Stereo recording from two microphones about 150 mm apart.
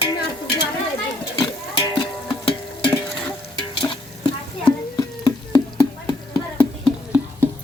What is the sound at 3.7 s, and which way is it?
Stir, 35° left (ahead or behind).